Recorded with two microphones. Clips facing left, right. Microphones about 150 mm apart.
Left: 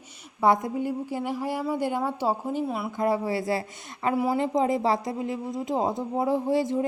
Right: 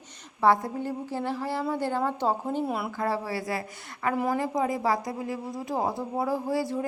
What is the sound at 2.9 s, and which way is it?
Speech, 20° left (ahead or behind).